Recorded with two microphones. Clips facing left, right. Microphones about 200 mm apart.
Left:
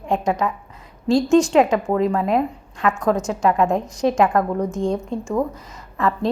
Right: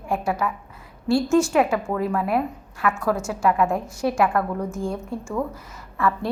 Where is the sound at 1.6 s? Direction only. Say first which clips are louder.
Left 4 dB; 35° left (ahead or behind).